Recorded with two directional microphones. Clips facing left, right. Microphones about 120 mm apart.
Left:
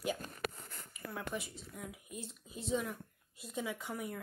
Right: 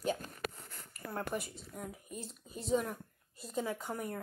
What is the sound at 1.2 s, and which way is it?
Speech, centre (ahead or behind).